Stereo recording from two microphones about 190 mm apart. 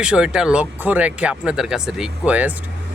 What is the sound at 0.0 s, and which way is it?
A man's voice, 5° right (ahead or behind).